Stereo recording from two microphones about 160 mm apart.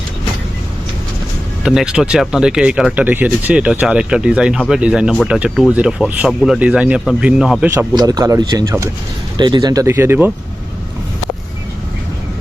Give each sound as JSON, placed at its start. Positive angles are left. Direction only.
{"t": 1.6, "sound": "speech", "side_deg": -5}
{"t": 7.7, "sound": "speech", "side_deg": -20}